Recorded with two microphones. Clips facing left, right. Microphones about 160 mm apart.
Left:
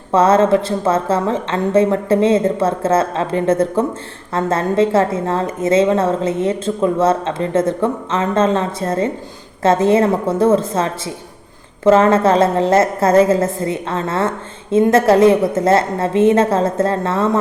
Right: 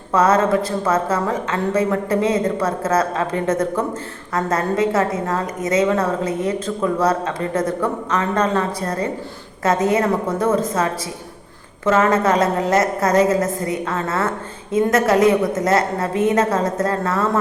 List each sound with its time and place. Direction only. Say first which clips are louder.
0.1 s a woman's voice: left 4 dB; 30° left (ahead or behind)